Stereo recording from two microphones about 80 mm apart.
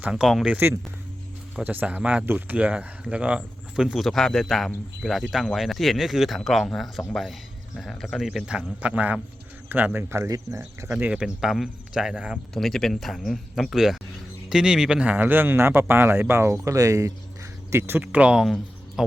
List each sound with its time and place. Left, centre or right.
0.0 s speech: centre
1.6 s speech: right
2.2 s speech: right; by 8.6 s centre
8.8 s speech: centre
10.0 s speech: right
11.1 s speech: centre
12.5 s speech: centre
15.2 s speech: right
17.7 s speech: right
18.0 s speech: centre
18.4 s a sound: centre